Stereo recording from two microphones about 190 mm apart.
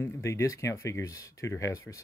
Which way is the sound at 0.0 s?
15° left (ahead or behind).